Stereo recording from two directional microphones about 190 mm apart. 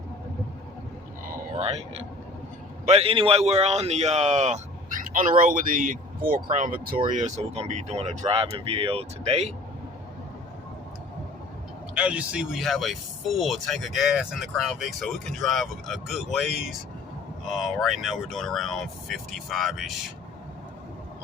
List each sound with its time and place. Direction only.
1.5 s a man's voice: 30° right (ahead or behind)
11.9 s speech: 5° right (ahead or behind)